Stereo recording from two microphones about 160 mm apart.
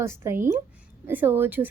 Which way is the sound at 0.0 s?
15° right (ahead or behind).